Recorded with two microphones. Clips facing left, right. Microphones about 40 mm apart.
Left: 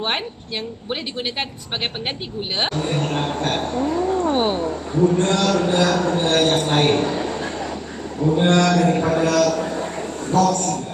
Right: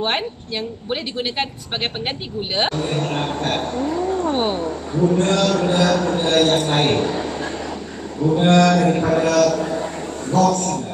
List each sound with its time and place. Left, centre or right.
0.8 s mantra: centre
2.5 s mantra: centre
3.4 s speech: centre
6.1 s mantra: centre
6.7 s a man's voice: centre
8.2 s mantra: centre
9.3 s a sound: centre
10.4 s a man's voice: centre